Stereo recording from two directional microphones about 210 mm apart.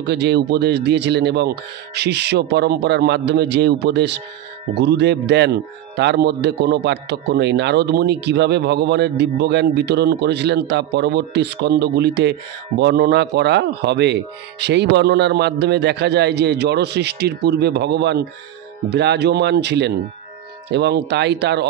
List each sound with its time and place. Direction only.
0.0 s speech: 55° right (ahead or behind)